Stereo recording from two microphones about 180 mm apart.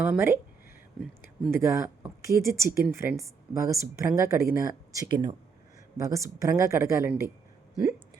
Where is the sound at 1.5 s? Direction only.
15° right (ahead or behind).